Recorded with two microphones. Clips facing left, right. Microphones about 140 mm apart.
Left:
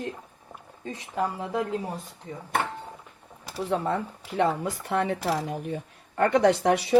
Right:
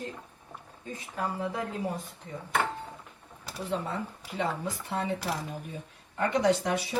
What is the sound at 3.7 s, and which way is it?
Speech, 65° left (ahead or behind).